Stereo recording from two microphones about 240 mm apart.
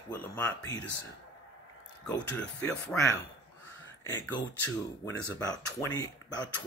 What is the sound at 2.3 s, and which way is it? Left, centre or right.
Speech, centre.